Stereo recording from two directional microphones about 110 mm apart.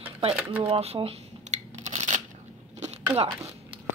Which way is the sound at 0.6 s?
60° right (ahead or behind).